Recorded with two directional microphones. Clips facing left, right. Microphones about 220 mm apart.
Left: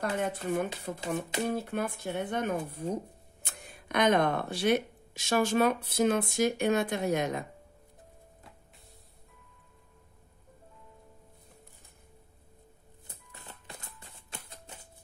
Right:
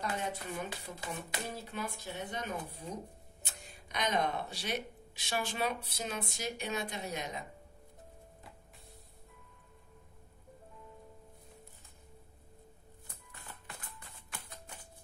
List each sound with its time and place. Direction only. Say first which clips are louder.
0.0 s speech: left 6 dB; 55° left (ahead or behind)
13.0 s shuffling cards: left 4 dB; 20° left (ahead or behind)
13.5 s a sound: left 2 dB; 20° left (ahead or behind)